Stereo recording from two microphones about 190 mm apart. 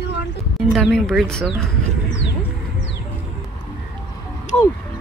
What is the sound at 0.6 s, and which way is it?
Speech, centre (ahead or behind).